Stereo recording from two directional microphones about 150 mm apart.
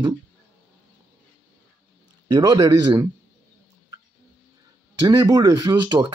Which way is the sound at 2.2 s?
25° right (ahead or behind).